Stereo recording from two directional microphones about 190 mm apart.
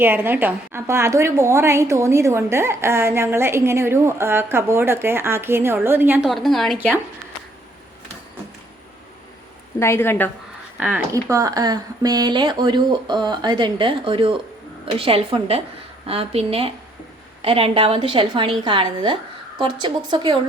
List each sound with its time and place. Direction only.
0.0 s a woman's voice: 10° right (ahead or behind)
6.7 s a woman's voice: 10° right (ahead or behind)
9.8 s a woman's voice: 10° left (ahead or behind)
10.8 s a woman's voice: 5° right (ahead or behind); by 20.3 s 25° right (ahead or behind)